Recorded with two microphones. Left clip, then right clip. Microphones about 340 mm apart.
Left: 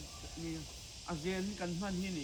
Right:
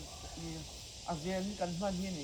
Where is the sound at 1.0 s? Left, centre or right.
Right.